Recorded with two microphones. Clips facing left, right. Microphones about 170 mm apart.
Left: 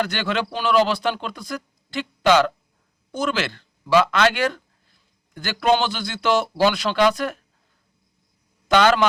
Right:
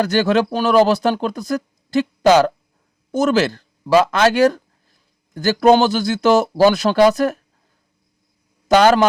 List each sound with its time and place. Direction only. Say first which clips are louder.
0.0 s speech: right 8 dB; 40° right (ahead or behind)
8.6 s a man's voice: right 5 dB; 40° right (ahead or behind)